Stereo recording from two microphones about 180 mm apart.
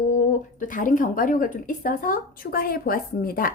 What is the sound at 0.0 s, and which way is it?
Speech, 45° left (ahead or behind).